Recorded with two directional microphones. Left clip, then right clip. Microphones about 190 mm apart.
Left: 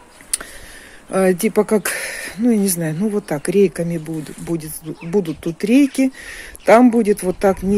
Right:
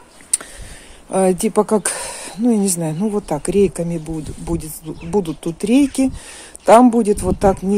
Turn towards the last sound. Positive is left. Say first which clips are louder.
# right 1 dB
turn(degrees=0)  # may be behind; listen again after turning